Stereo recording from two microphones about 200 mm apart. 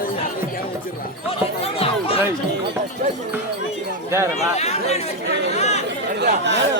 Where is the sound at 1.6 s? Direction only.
30° left (ahead or behind).